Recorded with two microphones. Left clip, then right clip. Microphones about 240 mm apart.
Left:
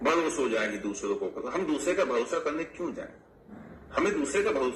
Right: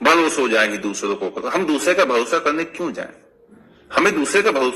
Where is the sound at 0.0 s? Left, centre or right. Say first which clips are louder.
Right 11 dB; right.